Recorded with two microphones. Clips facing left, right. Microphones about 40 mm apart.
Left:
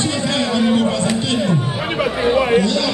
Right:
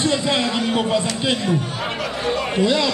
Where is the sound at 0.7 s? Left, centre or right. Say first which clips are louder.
Left 3 dB; centre.